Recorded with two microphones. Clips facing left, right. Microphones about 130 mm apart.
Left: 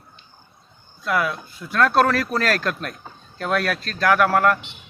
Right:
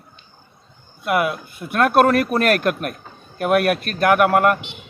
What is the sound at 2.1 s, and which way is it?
Speech, 55° right (ahead or behind).